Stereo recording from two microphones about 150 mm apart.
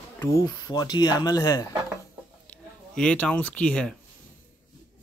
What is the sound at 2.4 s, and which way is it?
Speech, 5° left (ahead or behind).